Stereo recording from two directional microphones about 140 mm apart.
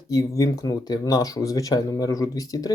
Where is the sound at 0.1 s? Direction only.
25° left (ahead or behind).